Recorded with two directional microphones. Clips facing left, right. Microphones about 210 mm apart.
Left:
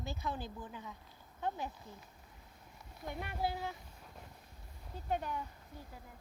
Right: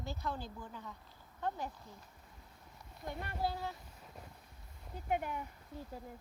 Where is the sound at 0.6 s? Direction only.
10° left (ahead or behind).